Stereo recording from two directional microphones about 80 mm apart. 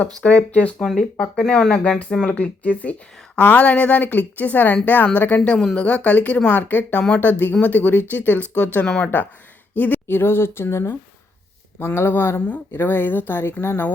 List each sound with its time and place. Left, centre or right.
0.2 s speech: centre
0.8 s speech: centre; by 5.4 s left
5.5 s speech: centre; by 13.9 s left